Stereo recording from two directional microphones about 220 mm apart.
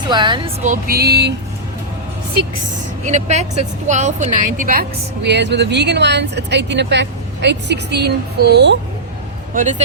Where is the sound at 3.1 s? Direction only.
30° right (ahead or behind); by 8.8 s 50° right (ahead or behind).